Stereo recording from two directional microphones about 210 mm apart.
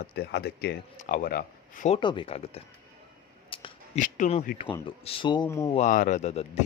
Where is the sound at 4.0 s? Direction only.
35° left (ahead or behind); by 5.7 s 15° left (ahead or behind).